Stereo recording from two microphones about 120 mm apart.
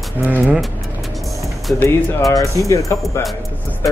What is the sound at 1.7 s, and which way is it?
Speech, 15° left (ahead or behind).